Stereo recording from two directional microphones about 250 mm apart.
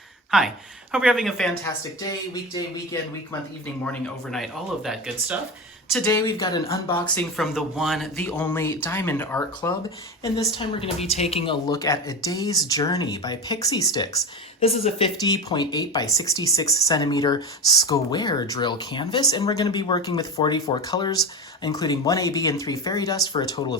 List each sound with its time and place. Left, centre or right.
0.3 s speech: centre
4.0 s speech: centre